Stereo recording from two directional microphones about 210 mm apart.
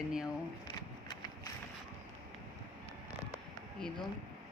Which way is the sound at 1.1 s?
20° left (ahead or behind).